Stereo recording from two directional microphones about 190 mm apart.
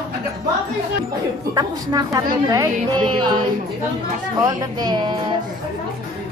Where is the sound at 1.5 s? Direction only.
20° right (ahead or behind).